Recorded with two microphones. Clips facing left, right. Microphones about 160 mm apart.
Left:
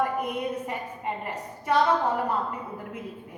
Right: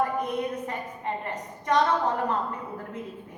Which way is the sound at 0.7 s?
10° left (ahead or behind).